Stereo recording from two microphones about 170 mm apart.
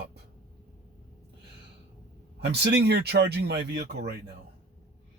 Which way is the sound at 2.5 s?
80° right.